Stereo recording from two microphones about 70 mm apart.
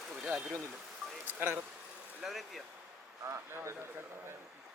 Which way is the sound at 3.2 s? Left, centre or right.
Right.